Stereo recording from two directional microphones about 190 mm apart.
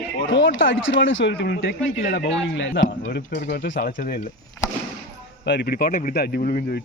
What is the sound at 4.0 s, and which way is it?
Speech, 45° left (ahead or behind).